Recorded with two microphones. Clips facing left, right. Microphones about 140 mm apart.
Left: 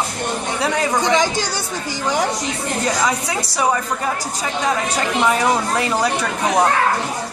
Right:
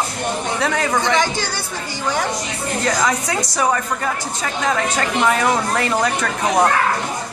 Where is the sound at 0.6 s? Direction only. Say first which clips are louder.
Left 2 dB; 15° left (ahead or behind).